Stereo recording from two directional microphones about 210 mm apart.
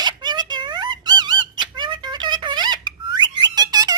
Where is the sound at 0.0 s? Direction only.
20° right (ahead or behind).